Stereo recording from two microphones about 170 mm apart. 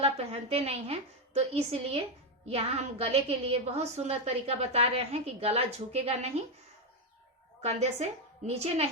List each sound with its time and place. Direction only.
0.0 s a woman's voice: 35° right (ahead or behind)
7.6 s a woman's voice: 40° right (ahead or behind)